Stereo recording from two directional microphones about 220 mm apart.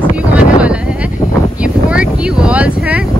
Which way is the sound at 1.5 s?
5° right (ahead or behind).